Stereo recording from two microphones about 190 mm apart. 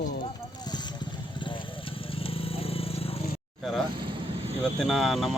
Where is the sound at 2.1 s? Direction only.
30° left (ahead or behind).